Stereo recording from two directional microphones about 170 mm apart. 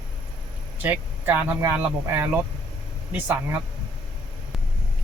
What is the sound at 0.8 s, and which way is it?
Speech, 10° right (ahead or behind).